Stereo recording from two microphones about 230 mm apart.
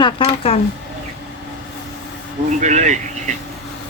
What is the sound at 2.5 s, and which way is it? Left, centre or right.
Speech, right.